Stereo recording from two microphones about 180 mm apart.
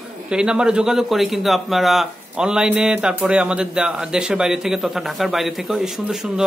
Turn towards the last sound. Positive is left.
turn(degrees=-5)  # may be behind; listen again after turning